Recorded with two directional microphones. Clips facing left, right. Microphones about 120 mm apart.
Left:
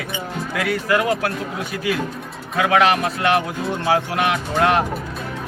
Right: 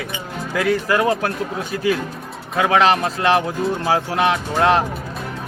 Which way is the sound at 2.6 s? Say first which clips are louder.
Right 1 dB; 30° right (ahead or behind).